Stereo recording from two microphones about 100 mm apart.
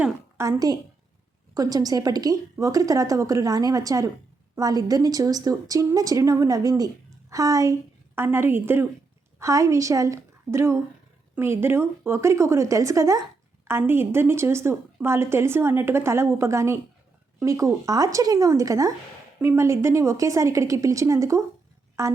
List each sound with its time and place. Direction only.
0.3 s a woman's voice: 25° right (ahead or behind)
1.5 s a woman's voice: 40° right (ahead or behind)